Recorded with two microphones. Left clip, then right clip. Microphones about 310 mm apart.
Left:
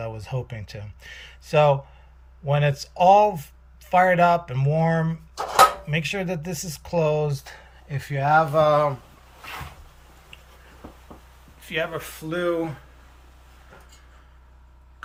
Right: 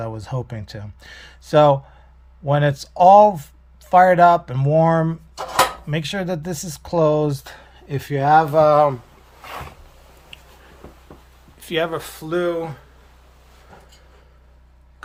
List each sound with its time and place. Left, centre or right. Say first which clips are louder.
0.1 s speech: right 4 dB; right
11.6 s speech: right 5 dB; right